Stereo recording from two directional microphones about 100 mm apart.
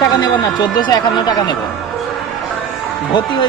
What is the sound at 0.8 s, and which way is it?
Speech, 40° left (ahead or behind).